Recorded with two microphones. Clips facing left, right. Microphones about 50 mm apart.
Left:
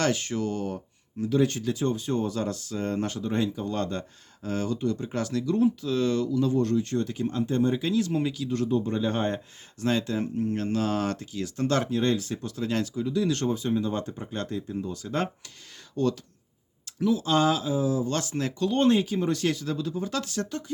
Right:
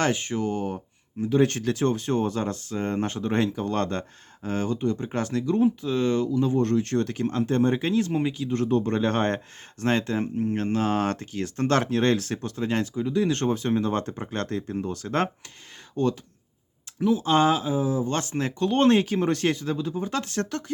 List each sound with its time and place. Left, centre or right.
0.0 s speech: right
1.4 s speech: right
3.2 s speech: right
4.4 s speech: right
6.7 s speech: right
8.7 s speech: right
9.8 s speech: right
11.8 s speech: right
12.5 s speech: right
13.5 s speech: right
16.0 s speech: right
18.7 s speech: right
20.4 s speech: right